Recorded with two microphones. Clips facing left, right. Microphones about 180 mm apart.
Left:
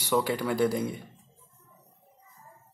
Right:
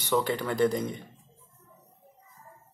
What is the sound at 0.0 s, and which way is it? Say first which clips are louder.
Speech: even; 10° left (ahead or behind).